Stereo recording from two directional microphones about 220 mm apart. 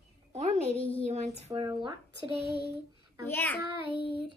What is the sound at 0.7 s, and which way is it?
Speech, 25° left (ahead or behind).